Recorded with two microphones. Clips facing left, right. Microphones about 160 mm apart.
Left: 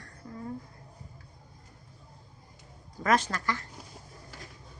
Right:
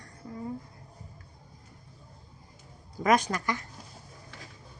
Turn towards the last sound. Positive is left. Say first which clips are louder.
# right 2 dB
turn(degrees=-15)  # may be behind; listen again after turning